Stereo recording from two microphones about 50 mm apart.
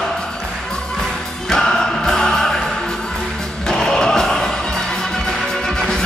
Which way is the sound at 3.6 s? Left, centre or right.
Centre.